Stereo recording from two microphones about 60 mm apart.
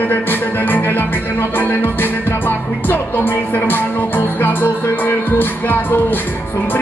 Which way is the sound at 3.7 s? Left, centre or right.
Left.